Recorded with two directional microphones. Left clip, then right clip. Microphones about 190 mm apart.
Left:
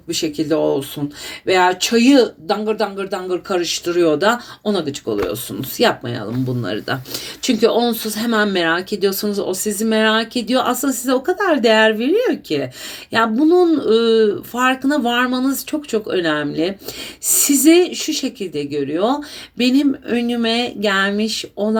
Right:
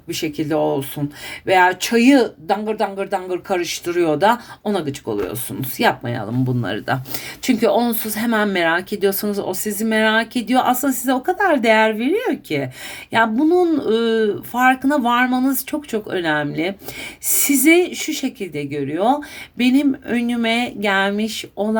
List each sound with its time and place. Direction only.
0.1 s speech: 20° right (ahead or behind)